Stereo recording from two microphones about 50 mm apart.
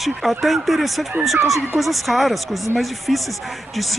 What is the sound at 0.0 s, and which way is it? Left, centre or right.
Speech, centre.